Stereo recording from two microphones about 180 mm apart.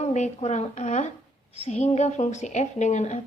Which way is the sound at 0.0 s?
40° left (ahead or behind).